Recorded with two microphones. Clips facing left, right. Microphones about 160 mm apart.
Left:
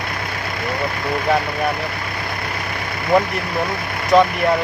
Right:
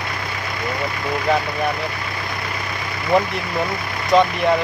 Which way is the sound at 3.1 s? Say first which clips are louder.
Left 1 dB; 5° left (ahead or behind).